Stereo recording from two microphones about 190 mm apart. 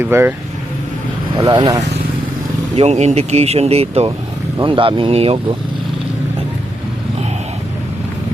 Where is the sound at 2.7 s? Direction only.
35° right (ahead or behind).